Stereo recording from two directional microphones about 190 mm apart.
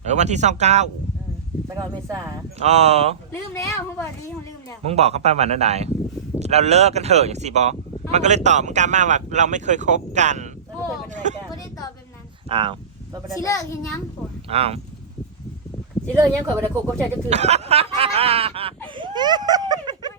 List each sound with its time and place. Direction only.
0.0 s speech: 35° right (ahead or behind)
1.7 s speech: 15° right (ahead or behind)
2.6 s speech: 35° right (ahead or behind)
3.3 s speech: 15° left (ahead or behind)
4.9 s speech: 35° right (ahead or behind)
11.1 s vehicle: 40° right (ahead or behind)
12.5 s speech: 25° right (ahead or behind)
13.4 s speech: 15° left (ahead or behind)
14.5 s speech: 30° right (ahead or behind)
16.1 s speech: 15° right (ahead or behind)
17.2 s speech: 35° right (ahead or behind)
18.9 s a sound: 25° right (ahead or behind)